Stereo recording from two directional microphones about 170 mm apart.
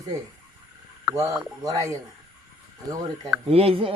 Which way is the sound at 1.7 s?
20° right (ahead or behind).